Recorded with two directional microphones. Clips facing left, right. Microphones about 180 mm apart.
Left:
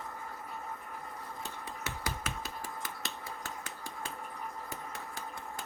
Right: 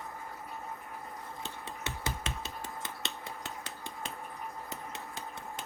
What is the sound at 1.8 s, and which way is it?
Finger snapping, 25° right (ahead or behind).